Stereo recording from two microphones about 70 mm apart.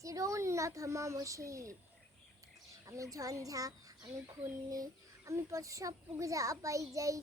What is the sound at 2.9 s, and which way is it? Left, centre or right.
Speech, right.